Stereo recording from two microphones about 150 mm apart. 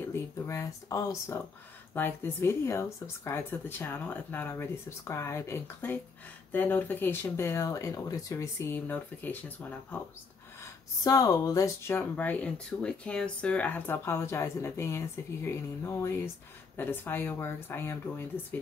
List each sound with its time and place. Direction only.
0.1 s speech: 20° left (ahead or behind)
10.6 s speech: 25° left (ahead or behind)